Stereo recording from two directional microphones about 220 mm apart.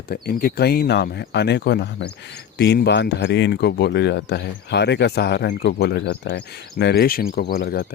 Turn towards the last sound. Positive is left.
turn(degrees=45)  # may be behind; listen again after turning